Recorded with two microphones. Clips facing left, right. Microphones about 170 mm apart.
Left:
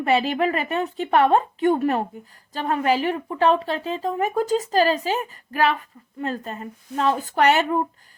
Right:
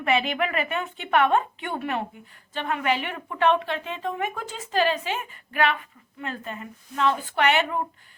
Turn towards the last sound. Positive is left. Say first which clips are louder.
# left 4 dB
turn(degrees=40)  # may be behind; listen again after turning